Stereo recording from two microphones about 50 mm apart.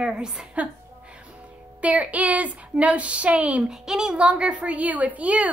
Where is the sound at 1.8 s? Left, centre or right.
Right.